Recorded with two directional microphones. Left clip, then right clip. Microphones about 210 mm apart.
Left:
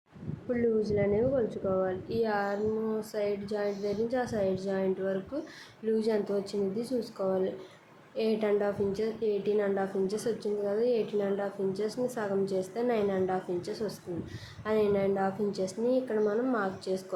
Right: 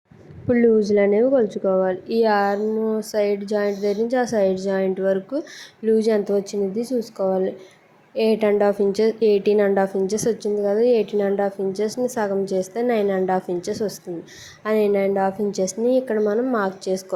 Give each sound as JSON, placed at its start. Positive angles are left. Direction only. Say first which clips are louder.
{"t": 0.4, "sound": "speech", "louder": "right 12 dB", "side_deg": -35}